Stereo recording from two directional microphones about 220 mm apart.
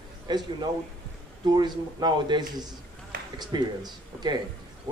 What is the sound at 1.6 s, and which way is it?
Speech, 20° right (ahead or behind).